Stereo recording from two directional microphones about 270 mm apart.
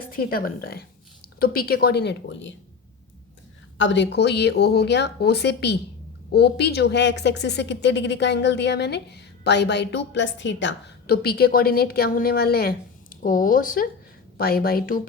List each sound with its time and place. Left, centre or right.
0.1 s speech: left
3.8 s speech: left